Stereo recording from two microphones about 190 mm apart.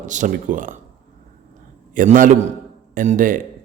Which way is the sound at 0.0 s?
40° right (ahead or behind).